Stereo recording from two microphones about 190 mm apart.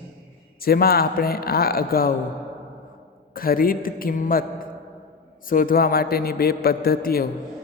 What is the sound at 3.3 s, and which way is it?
A man's voice, 50° left (ahead or behind).